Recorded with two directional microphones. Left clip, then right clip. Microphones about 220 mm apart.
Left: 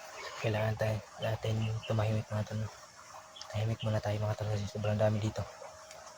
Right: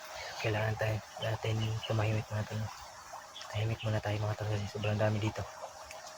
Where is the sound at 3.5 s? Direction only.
Centre (ahead or behind).